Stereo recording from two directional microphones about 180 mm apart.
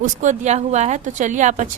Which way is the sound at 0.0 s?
40° right (ahead or behind).